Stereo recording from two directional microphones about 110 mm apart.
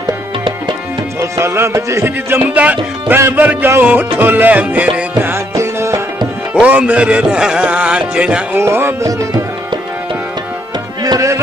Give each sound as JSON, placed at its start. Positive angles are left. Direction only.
{"t": 1.3, "sound": "music", "side_deg": -25}
{"t": 5.3, "sound": "music", "side_deg": -25}
{"t": 6.5, "sound": "music", "side_deg": -10}
{"t": 8.5, "sound": "music", "side_deg": -20}
{"t": 11.1, "sound": "music", "side_deg": -30}